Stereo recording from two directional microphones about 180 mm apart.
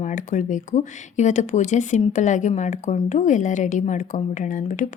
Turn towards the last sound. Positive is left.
turn(degrees=45)  # may be behind; listen again after turning